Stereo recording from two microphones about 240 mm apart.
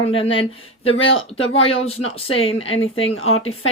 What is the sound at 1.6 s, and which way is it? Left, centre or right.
Speech, left.